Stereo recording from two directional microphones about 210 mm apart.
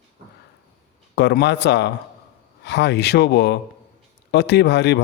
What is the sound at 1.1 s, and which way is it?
Speech, 55° left (ahead or behind).